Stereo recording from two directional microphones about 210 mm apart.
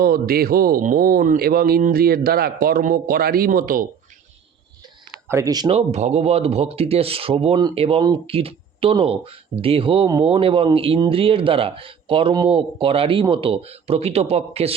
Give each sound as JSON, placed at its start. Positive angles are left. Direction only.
{"t": 0.0, "sound": "speech", "side_deg": -45}
{"t": 5.1, "sound": "speech", "side_deg": -15}